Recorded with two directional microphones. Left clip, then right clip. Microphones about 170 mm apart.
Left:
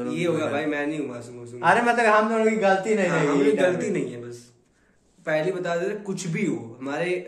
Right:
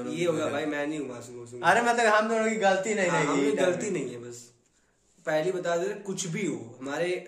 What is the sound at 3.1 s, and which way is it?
A man's voice, 30° right (ahead or behind).